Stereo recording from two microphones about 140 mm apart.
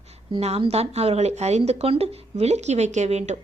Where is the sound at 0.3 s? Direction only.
45° right (ahead or behind).